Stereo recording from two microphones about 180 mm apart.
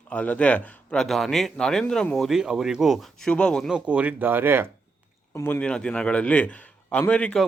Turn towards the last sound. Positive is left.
turn(degrees=5)  # may be behind; listen again after turning